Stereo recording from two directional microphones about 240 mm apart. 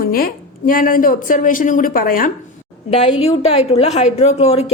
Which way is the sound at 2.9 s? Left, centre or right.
Left.